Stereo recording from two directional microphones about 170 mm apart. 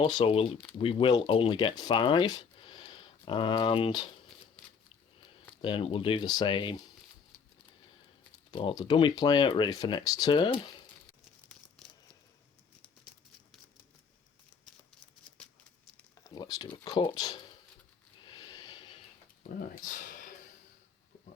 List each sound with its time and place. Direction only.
0.0 s speech: 30° left (ahead or behind)
5.6 s speech: 30° left (ahead or behind)
8.4 s speech: 25° left (ahead or behind)
16.2 s a sound: 20° left (ahead or behind)
16.7 s speech: 25° left (ahead or behind)
18.3 s snort: 25° left (ahead or behind)
19.5 s speech: 50° left (ahead or behind)